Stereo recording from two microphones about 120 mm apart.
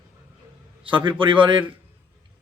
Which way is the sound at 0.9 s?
45° right (ahead or behind).